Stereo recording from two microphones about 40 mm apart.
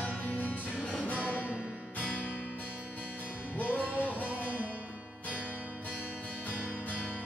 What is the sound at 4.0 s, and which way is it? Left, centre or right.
Music, left.